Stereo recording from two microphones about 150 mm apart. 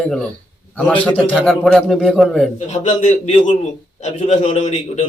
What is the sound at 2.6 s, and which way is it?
A man's voice, 50° left (ahead or behind).